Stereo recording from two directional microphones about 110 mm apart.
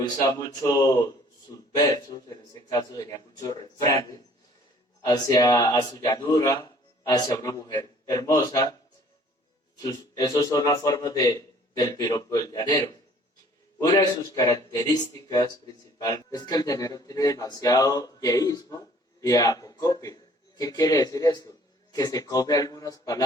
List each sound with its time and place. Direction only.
0.0 s speech: 35° left (ahead or behind)
5.0 s speech: 40° left (ahead or behind)
9.7 s speech: 35° left (ahead or behind)
13.7 s speech: 40° left (ahead or behind)